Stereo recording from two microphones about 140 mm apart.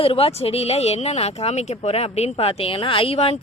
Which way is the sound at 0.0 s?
40° left (ahead or behind).